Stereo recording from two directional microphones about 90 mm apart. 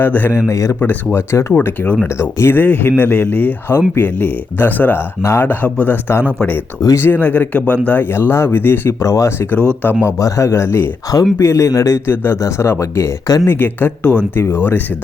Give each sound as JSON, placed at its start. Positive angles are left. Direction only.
{"t": 0.0, "sound": "speech", "side_deg": 20}
{"t": 0.3, "sound": "speech", "side_deg": 35}
{"t": 0.8, "sound": "speech", "side_deg": 25}
{"t": 1.5, "sound": "speech", "side_deg": 20}
{"t": 5.5, "sound": "speech", "side_deg": 15}
{"t": 9.0, "sound": "speech", "side_deg": 35}
{"t": 12.0, "sound": "speech", "side_deg": 25}
{"t": 13.2, "sound": "speech", "side_deg": 40}
{"t": 13.5, "sound": "speech", "side_deg": 25}
{"t": 14.4, "sound": "speech", "side_deg": 25}